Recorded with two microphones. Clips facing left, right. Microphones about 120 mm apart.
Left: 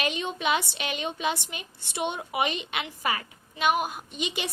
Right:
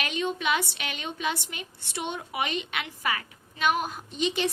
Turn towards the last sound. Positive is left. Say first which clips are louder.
# right 5 dB
turn(degrees=10)  # may be behind; listen again after turning